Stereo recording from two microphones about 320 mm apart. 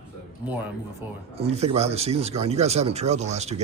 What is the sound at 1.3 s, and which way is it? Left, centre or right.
Speech, centre.